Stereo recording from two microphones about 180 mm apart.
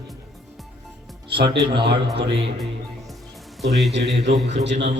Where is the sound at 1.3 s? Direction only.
30° right (ahead or behind).